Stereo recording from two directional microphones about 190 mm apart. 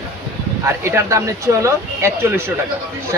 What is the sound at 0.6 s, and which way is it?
Speech, 15° right (ahead or behind).